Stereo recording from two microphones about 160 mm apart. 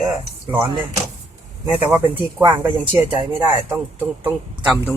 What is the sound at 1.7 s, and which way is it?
Speech, 10° right (ahead or behind).